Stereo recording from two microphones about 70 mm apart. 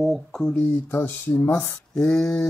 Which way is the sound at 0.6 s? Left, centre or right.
Left.